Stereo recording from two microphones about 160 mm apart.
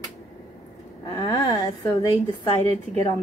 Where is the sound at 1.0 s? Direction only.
25° left (ahead or behind).